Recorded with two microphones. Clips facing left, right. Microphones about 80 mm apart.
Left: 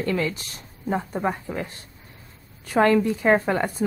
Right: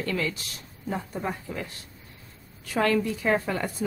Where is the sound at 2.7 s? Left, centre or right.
Left.